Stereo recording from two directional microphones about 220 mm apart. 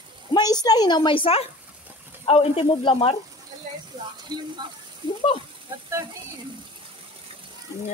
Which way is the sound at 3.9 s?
15° right (ahead or behind).